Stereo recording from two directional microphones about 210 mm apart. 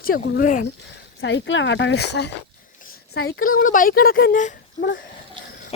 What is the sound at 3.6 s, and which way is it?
Speech, 40° left (ahead or behind).